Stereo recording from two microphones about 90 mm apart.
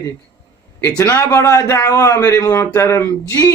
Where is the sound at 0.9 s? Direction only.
35° left (ahead or behind).